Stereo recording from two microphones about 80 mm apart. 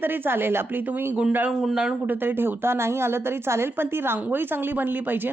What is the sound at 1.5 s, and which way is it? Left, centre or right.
Speech, centre.